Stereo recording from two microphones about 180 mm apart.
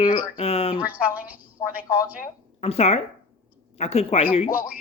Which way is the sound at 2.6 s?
35° left (ahead or behind).